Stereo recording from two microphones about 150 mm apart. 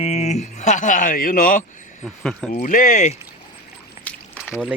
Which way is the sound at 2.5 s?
60° left (ahead or behind).